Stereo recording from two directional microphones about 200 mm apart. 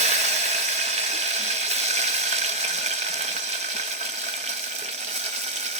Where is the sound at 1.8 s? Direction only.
35° right (ahead or behind).